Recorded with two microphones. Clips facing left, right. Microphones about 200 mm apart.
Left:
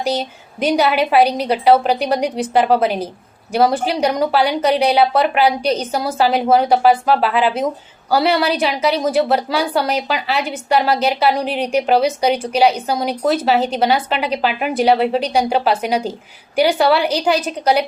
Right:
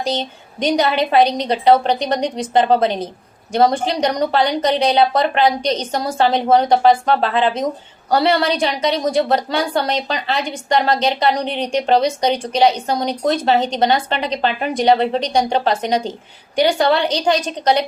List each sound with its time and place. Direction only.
0.0 s a woman's voice: 10° left (ahead or behind)